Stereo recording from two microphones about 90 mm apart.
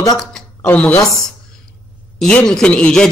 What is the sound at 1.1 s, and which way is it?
A man's voice, 5° left (ahead or behind).